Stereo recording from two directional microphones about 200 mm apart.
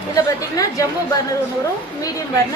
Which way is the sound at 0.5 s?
15° left (ahead or behind).